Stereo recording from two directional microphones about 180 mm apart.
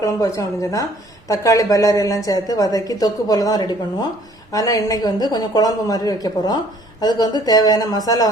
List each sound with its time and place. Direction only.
0.0 s a woman's voice: 15° left (ahead or behind)